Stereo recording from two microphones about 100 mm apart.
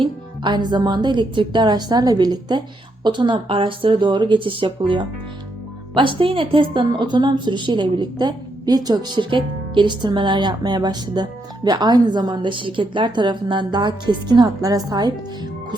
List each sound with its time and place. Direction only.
0.0 s a woman's voice: 50° right (ahead or behind)